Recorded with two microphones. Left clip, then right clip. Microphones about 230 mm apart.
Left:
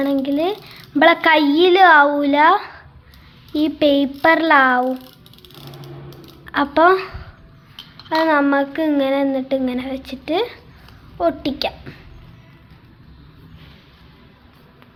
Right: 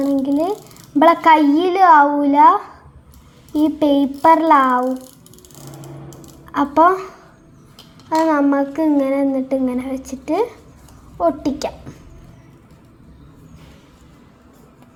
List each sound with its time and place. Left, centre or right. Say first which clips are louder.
0.0 s a child's voice: right 1 dB; centre
3.8 s speech: left 4 dB; centre
6.4 s a woman's voice: right 1 dB; centre
8.1 s speech: even; centre